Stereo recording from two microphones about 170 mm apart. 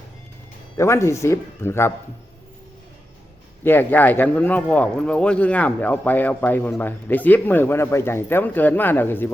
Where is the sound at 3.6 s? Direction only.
10° left (ahead or behind).